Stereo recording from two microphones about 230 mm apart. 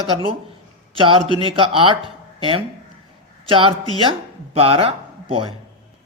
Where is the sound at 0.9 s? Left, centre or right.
Right.